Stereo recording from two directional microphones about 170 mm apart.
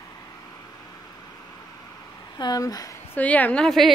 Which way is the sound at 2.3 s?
25° left (ahead or behind).